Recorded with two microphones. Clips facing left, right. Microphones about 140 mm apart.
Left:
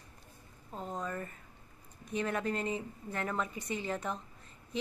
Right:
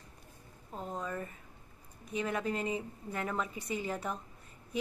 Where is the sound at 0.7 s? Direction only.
Centre (ahead or behind).